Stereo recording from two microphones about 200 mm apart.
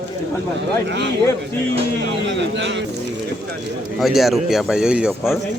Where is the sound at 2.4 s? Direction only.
60° right (ahead or behind).